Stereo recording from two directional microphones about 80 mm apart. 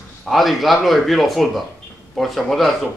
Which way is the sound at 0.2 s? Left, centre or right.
Centre.